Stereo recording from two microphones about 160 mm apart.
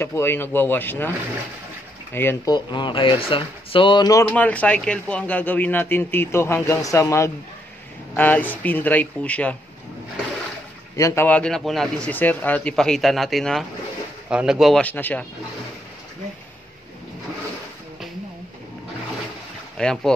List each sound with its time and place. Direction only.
0.0 s a man's voice: 15° left (ahead or behind)
2.1 s a man's voice: 15° left (ahead or behind)
2.5 s speech: 30° left (ahead or behind)
4.3 s a man's voice: 10° left (ahead or behind)
11.0 s speech: 15° left (ahead or behind)
19.8 s speech: 5° left (ahead or behind)